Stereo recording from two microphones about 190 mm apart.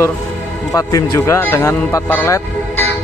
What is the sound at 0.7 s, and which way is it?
A man's voice, 20° left (ahead or behind).